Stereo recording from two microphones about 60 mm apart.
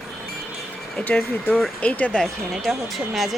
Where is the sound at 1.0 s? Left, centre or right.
Left.